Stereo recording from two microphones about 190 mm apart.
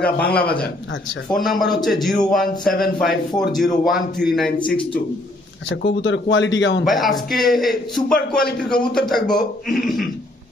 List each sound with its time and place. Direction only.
0.4 s a man's voice: 55° left (ahead or behind)
1.3 s a man's voice: centre (ahead or behind)
5.7 s speech: 75° left (ahead or behind)
6.8 s a man's voice: centre (ahead or behind)